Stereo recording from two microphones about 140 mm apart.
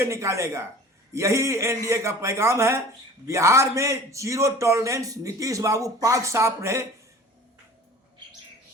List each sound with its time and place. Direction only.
0.0 s a man's voice: 20° right (ahead or behind)